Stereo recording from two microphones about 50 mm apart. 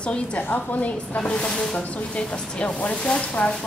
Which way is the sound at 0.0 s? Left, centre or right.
Left.